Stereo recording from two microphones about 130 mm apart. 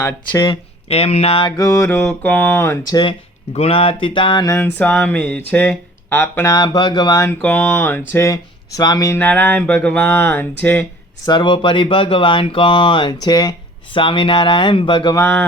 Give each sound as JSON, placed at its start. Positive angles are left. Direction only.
{"t": 0.4, "sound": "speech", "side_deg": 45}
{"t": 1.5, "sound": "mantra", "side_deg": 25}
{"t": 2.0, "sound": "speech", "side_deg": 10}
{"t": 2.9, "sound": "speech", "side_deg": 40}
{"t": 4.4, "sound": "speech", "side_deg": 15}
{"t": 7.3, "sound": "speech", "side_deg": 10}
{"t": 9.2, "sound": "speech", "side_deg": 15}
{"t": 11.3, "sound": "speech", "side_deg": 35}
{"t": 15.1, "sound": "speech", "side_deg": 15}